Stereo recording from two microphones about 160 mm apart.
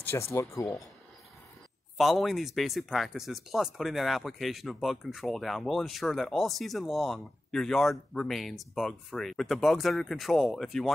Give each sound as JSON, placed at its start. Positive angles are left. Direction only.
{"t": 0.0, "sound": "speech", "side_deg": 15}
{"t": 2.0, "sound": "speech", "side_deg": 0}